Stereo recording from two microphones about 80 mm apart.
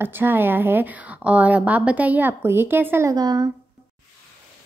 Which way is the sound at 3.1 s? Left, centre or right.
Right.